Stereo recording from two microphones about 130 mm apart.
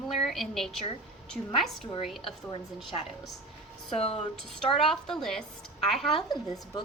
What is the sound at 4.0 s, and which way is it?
Speech, 50° left (ahead or behind).